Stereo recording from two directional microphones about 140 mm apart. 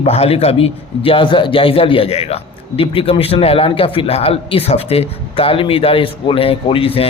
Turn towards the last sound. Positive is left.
turn(degrees=40)  # may be behind; listen again after turning